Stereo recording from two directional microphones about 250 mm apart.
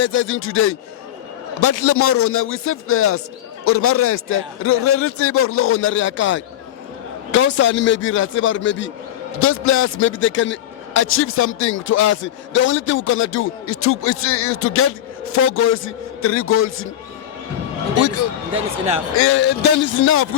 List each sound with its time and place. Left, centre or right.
0.0 s a man's voice: left
1.6 s a man's voice: left
19.1 s a man's voice: left
19.4 s a man's voice: left